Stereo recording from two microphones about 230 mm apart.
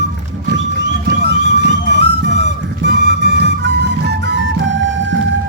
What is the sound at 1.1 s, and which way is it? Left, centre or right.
Music, right.